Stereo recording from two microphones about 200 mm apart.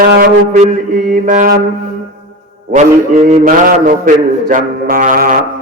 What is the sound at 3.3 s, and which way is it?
Mantra, 40° right (ahead or behind).